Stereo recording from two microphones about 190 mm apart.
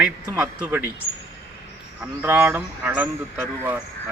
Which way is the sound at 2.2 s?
10° right (ahead or behind).